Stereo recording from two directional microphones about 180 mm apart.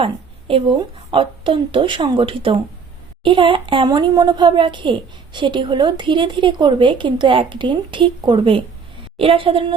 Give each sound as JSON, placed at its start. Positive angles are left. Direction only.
{"t": 0.0, "sound": "a woman's voice", "side_deg": -30}